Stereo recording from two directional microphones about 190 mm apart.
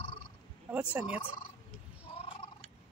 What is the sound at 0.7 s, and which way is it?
Speech, 5° right (ahead or behind).